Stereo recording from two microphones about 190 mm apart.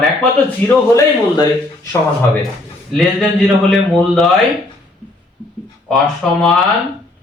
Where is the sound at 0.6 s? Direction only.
15° left (ahead or behind).